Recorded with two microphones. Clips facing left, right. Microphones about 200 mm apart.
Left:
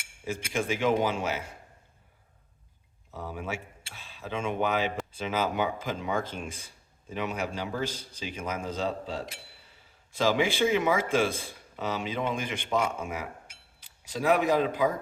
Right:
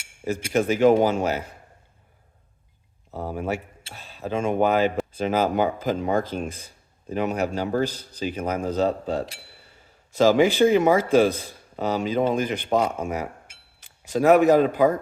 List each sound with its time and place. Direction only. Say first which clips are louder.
0.3 s speech: right 8 dB; 40° right (ahead or behind)
3.1 s a man's voice: right 8 dB; 40° right (ahead or behind)
13.8 s speech: right 8 dB; 50° right (ahead or behind)